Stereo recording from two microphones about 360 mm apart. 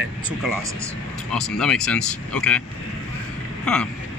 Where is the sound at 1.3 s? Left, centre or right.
Centre.